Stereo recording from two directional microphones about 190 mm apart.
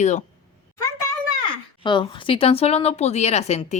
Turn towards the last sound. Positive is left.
turn(degrees=35)  # may be behind; listen again after turning